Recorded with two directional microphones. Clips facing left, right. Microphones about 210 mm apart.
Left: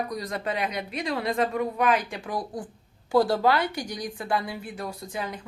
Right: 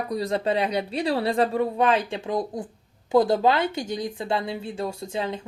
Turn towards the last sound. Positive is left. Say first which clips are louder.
# right 5 dB
turn(degrees=-25)  # may be behind; listen again after turning